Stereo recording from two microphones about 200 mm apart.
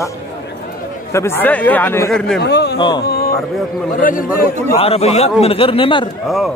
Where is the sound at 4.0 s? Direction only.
45° left (ahead or behind).